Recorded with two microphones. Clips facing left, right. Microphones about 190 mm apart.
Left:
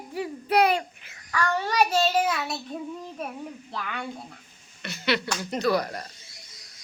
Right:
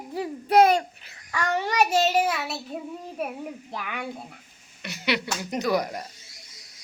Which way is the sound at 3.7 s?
15° right (ahead or behind).